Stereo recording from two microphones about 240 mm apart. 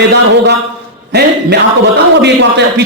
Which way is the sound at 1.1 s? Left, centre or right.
Right.